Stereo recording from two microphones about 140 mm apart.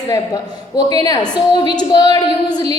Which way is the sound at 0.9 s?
30° left (ahead or behind).